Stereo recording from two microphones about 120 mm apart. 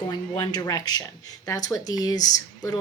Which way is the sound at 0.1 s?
35° left (ahead or behind).